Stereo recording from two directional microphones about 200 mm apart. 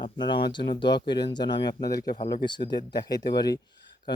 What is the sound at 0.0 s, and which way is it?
Speech, 25° left (ahead or behind).